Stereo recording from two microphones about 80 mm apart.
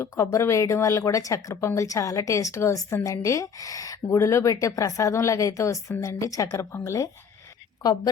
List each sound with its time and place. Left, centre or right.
0.0 s a woman's voice: left
7.8 s a woman's voice: left